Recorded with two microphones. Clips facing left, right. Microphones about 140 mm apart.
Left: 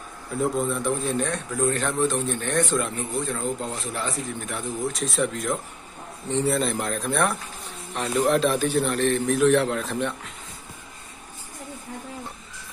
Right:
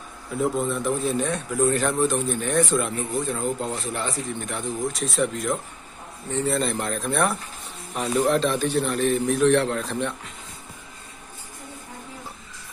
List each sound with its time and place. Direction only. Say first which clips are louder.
0.3 s a man's voice: even; centre (ahead or behind)
6.2 s speech: left 2 dB; 15° left (ahead or behind)
6.5 s a man's voice: even; centre (ahead or behind)